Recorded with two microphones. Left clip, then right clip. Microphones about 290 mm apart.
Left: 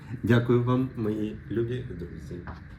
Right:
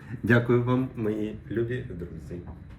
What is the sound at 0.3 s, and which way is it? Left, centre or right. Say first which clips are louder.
A man's voice: right 1 dB; centre.